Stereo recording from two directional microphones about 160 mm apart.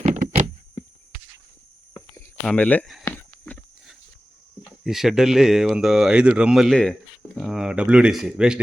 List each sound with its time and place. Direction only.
0.0 s a sound: 50° right (ahead or behind)
1.9 s cricket: 20° left (ahead or behind)
2.4 s speech: 5° left (ahead or behind)
3.0 s walk: 10° left (ahead or behind)
4.8 s speech: centre (ahead or behind)